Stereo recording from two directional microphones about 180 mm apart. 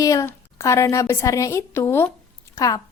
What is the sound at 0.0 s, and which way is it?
A woman's voice, 15° left (ahead or behind).